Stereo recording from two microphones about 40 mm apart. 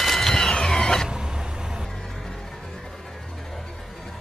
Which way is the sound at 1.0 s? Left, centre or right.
Centre.